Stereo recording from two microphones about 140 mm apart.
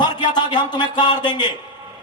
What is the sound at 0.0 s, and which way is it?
A man's voice, 30° left (ahead or behind).